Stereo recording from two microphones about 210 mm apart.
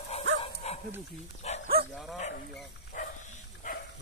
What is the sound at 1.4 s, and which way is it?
Dog, 30° left (ahead or behind).